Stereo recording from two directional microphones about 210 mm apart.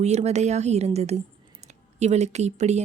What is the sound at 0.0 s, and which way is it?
Speech, 30° right (ahead or behind).